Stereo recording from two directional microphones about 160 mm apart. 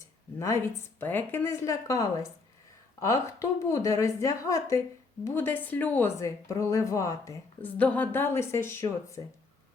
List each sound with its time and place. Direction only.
0.3 s a woman's voice: 15° left (ahead or behind)